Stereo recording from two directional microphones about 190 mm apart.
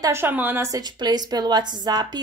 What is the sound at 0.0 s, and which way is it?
A woman's voice, 15° right (ahead or behind).